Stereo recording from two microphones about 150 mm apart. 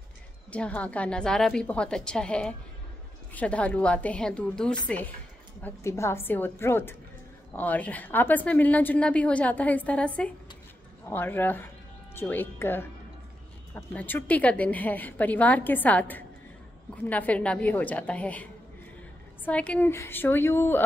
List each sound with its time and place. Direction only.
0.5 s a woman's voice: 10° left (ahead or behind)